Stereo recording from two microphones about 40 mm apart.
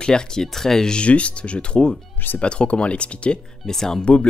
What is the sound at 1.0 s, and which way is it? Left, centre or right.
Speech, left.